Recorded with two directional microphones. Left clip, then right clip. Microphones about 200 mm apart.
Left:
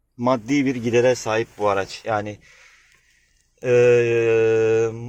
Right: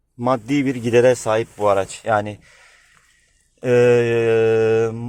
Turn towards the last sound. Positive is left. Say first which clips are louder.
# right 2 dB
turn(degrees=-15)  # may be behind; listen again after turning